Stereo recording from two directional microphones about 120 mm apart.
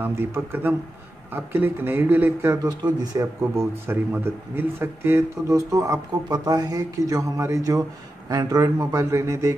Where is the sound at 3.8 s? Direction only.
15° right (ahead or behind).